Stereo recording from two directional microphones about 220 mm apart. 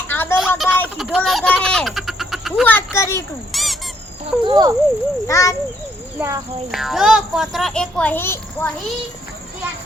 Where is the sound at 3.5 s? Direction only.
Centre (ahead or behind).